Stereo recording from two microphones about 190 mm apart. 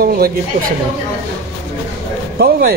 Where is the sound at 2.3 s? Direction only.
55° right (ahead or behind).